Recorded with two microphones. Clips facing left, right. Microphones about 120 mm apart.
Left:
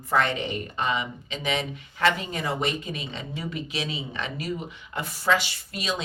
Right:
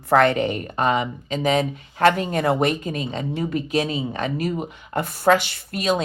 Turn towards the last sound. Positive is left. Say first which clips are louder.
# right 8 dB
turn(degrees=-55)  # may be behind; listen again after turning